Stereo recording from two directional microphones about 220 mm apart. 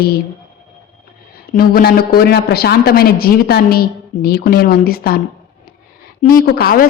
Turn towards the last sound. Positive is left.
turn(degrees=40)  # may be behind; listen again after turning